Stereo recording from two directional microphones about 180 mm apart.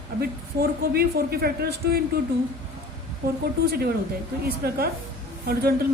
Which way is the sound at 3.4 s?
60° right (ahead or behind).